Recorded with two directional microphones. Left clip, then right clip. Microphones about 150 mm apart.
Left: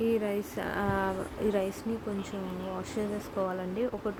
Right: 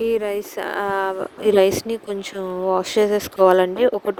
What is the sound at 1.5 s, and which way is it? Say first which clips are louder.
Speech: right 15 dB; 75° right (ahead or behind).